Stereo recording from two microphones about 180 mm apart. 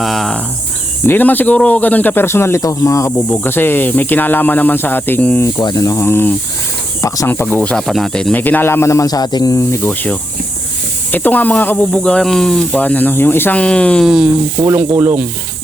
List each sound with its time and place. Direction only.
0.0 s cricket: centre (ahead or behind)
1.0 s a man's voice: 10° left (ahead or behind)
5.5 s a man's voice: 20° left (ahead or behind); by 14.3 s centre (ahead or behind)
14.6 s snake: 10° right (ahead or behind)